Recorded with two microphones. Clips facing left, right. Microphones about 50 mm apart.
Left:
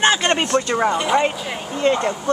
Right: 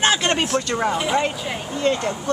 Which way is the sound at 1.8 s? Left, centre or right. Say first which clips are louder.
Left 3 dB; centre.